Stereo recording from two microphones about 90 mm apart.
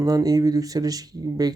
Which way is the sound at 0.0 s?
45° right (ahead or behind).